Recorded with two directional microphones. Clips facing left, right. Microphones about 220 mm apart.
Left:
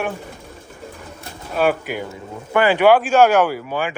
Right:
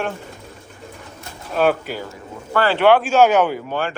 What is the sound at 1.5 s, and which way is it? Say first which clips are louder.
Speech: right 1 dB; 10° left (ahead or behind).